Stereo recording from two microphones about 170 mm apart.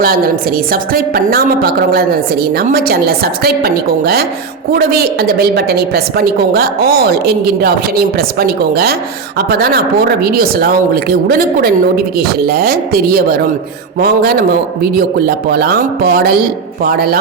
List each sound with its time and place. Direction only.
0.0 s a woman's voice: 60° right (ahead or behind)